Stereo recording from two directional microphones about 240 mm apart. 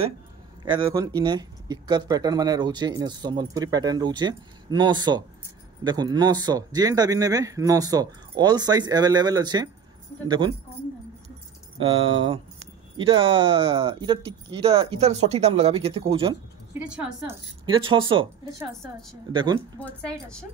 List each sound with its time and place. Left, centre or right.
0.7 s speech: centre
11.8 s speech: right
16.7 s a woman's voice: centre
17.6 s speech: right
19.3 s speech: centre
19.8 s a woman's voice: centre